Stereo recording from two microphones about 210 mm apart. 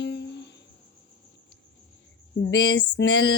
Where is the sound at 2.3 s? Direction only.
60° left (ahead or behind).